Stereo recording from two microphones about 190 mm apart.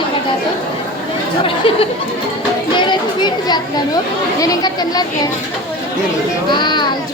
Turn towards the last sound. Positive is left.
turn(degrees=25)  # may be behind; listen again after turning